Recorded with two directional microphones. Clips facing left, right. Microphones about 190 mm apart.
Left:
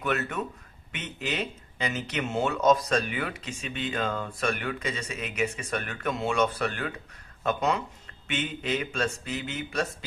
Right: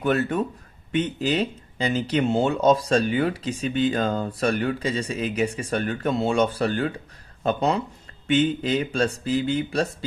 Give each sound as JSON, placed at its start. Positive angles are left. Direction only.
{"t": 0.0, "sound": "speech", "side_deg": -30}